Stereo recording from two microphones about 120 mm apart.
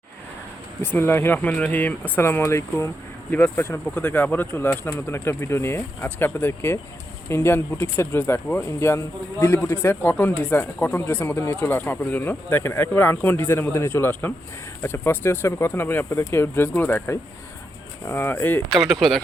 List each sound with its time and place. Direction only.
0.9 s speech: 15° left (ahead or behind)
18.7 s speech: centre (ahead or behind)